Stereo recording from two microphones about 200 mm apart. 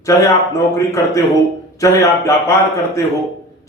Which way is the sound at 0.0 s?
15° left (ahead or behind).